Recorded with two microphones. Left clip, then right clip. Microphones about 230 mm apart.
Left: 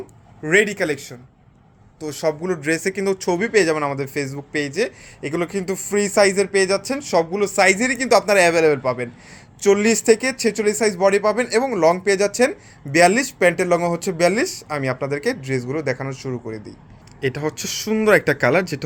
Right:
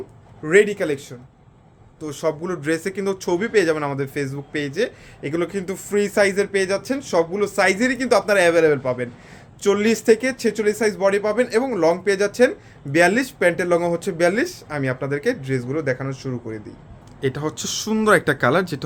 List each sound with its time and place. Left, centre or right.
0.4 s a man's voice: left
17.3 s speech: centre